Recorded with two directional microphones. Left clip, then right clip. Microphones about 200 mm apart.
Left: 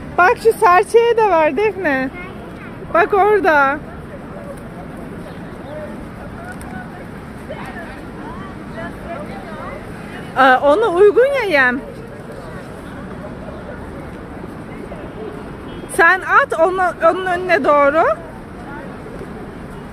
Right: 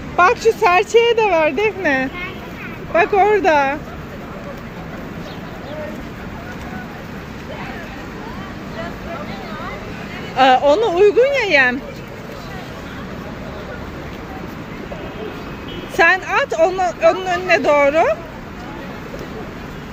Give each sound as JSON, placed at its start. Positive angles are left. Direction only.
{"t": 0.2, "sound": "speech", "side_deg": 15}
{"t": 10.3, "sound": "speech", "side_deg": 15}
{"t": 16.0, "sound": "speech", "side_deg": 15}